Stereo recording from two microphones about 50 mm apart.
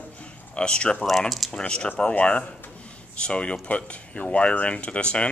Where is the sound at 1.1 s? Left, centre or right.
Centre.